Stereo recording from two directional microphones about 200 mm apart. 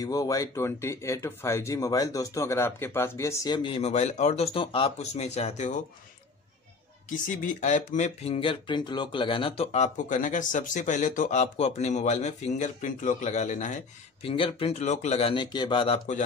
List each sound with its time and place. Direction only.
0.0 s speech: 20° left (ahead or behind); by 5.8 s 35° left (ahead or behind)
7.1 s speech: 40° left (ahead or behind)